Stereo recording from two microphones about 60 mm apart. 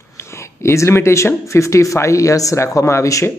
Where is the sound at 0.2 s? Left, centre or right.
Left.